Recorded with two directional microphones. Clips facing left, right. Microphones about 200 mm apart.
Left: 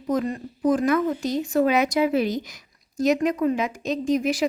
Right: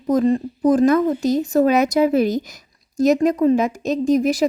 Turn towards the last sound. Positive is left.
turn(degrees=-40)  # may be behind; listen again after turning